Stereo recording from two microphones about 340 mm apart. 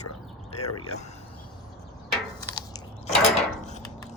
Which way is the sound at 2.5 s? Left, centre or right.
Centre.